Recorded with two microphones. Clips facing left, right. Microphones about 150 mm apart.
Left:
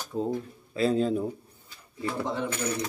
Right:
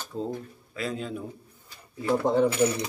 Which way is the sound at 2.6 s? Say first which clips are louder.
Right 6 dB; 10° right (ahead or behind).